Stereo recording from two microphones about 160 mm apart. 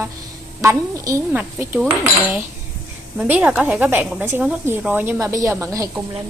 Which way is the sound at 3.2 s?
10° right (ahead or behind).